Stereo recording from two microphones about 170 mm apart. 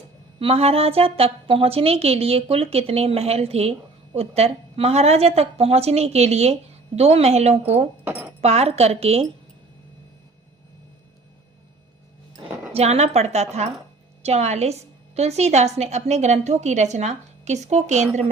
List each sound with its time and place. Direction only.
0.3 s a woman's voice: 35° right (ahead or behind)
12.7 s a woman's voice: 40° right (ahead or behind)